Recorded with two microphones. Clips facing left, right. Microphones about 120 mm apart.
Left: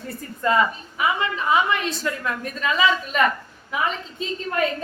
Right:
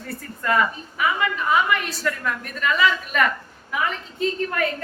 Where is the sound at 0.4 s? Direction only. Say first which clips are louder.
Left 2 dB; 20° left (ahead or behind).